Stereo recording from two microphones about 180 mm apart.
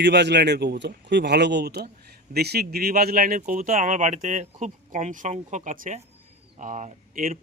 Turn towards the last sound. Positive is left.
turn(degrees=-50)  # may be behind; listen again after turning